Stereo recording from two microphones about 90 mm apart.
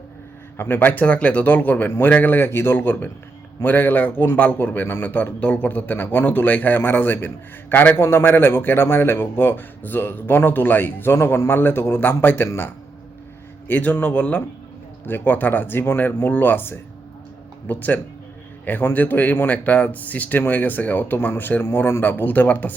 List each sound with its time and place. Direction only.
0.5 s a man's voice: 25° left (ahead or behind)